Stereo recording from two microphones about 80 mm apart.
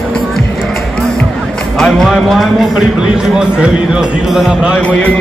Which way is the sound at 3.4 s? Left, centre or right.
Centre.